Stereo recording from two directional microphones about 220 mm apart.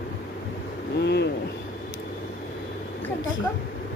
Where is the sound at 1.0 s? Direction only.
50° left (ahead or behind).